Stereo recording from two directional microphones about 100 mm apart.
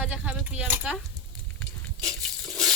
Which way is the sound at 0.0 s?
10° right (ahead or behind).